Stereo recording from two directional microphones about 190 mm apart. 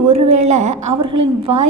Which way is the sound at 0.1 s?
35° right (ahead or behind).